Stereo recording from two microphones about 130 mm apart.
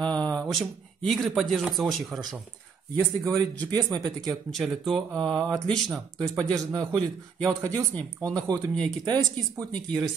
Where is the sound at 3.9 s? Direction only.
30° right (ahead or behind).